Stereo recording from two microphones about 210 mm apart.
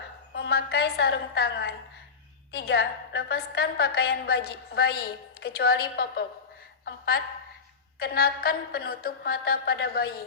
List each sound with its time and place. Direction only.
0.3 s a woman's voice: 50° left (ahead or behind)
6.8 s a sound: 45° left (ahead or behind)
7.9 s a woman's voice: 45° left (ahead or behind)